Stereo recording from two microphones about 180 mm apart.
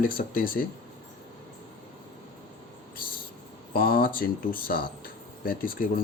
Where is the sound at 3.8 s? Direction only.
50° left (ahead or behind).